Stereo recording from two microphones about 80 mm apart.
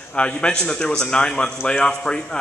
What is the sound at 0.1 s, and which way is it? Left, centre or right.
A man's voice, centre.